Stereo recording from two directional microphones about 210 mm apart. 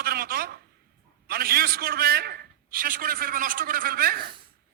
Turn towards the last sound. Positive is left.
turn(degrees=-45)  # may be behind; listen again after turning